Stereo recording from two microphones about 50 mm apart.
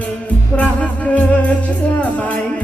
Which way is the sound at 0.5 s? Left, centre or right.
Left.